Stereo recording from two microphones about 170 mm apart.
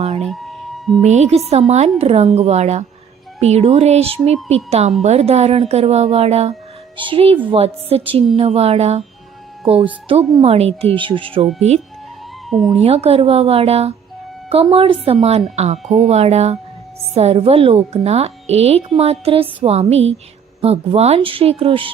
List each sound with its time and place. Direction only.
0.2 s music: centre (ahead or behind)
1.0 s a woman's voice: 40° right (ahead or behind)
10.1 s a woman's voice: 35° right (ahead or behind)
12.5 s speech: centre (ahead or behind)
12.7 s a woman's voice: 35° right (ahead or behind)